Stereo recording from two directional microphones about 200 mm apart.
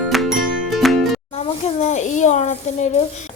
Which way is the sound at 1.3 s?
30° left (ahead or behind).